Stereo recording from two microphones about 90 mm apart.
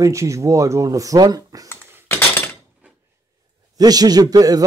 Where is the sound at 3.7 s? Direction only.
45° right (ahead or behind).